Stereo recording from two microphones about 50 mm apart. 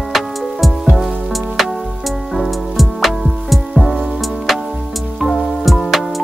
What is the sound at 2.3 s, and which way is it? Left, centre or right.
Music, centre.